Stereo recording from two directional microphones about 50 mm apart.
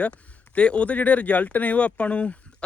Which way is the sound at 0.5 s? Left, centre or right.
Left.